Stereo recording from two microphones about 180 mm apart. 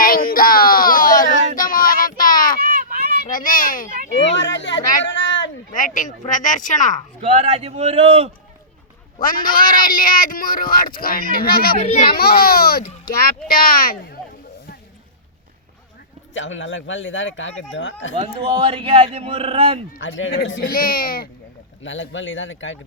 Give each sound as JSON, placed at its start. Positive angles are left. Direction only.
{"t": 0.0, "sound": "child singing", "side_deg": 50}
{"t": 3.2, "sound": "a child's voice", "side_deg": 50}
{"t": 4.2, "sound": "speech", "side_deg": 85}
{"t": 5.0, "sound": "a sound", "side_deg": 80}
{"t": 5.7, "sound": "speech", "side_deg": 45}
{"t": 7.2, "sound": "speech", "side_deg": -35}
{"t": 9.1, "sound": "speech", "side_deg": 50}
{"t": 16.3, "sound": "speech", "side_deg": 90}
{"t": 18.1, "sound": "speech", "side_deg": -30}
{"t": 20.0, "sound": "speech", "side_deg": 90}
{"t": 20.7, "sound": "speech", "side_deg": 55}
{"t": 21.8, "sound": "speech", "side_deg": 90}